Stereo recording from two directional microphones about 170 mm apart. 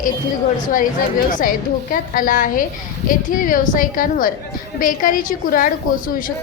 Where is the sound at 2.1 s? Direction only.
50° left (ahead or behind).